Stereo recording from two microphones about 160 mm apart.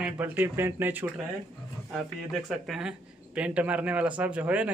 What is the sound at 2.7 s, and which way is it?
A man's voice, 5° right (ahead or behind).